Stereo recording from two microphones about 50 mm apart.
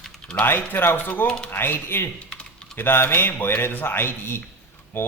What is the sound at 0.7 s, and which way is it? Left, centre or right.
A man's voice, left.